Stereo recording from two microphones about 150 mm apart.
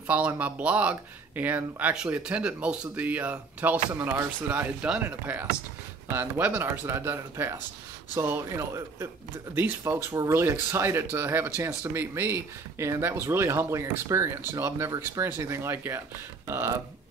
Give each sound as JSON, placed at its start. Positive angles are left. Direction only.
{"t": 0.0, "sound": "speech", "side_deg": -10}